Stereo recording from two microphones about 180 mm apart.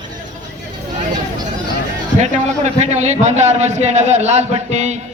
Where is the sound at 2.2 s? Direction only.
40° right (ahead or behind).